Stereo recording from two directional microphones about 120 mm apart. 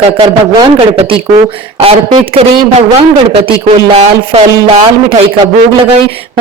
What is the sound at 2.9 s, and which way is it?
A man's voice, 60° right (ahead or behind).